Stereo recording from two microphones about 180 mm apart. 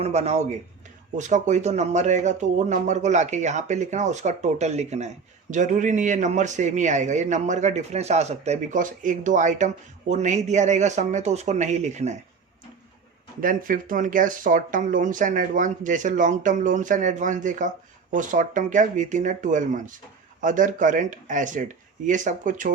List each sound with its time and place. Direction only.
0.0 s speech: 35° right (ahead or behind)
13.4 s speech: 50° right (ahead or behind)